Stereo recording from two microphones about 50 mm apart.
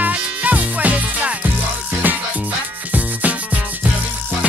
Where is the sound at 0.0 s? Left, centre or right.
Right.